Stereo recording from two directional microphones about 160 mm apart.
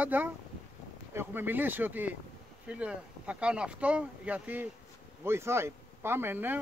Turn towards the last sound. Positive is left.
turn(degrees=-10)  # may be behind; listen again after turning